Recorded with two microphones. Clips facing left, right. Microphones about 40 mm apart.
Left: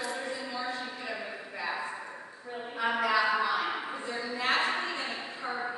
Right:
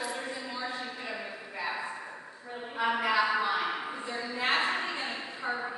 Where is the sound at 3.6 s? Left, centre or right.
Centre.